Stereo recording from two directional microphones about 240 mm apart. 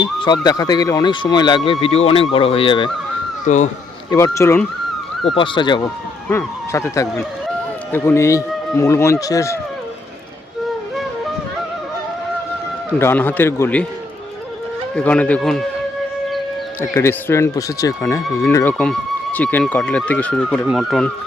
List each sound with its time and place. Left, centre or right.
0.0 s speech: centre
4.1 s speech: centre
12.9 s speech: centre
14.9 s speech: centre
16.9 s speech: centre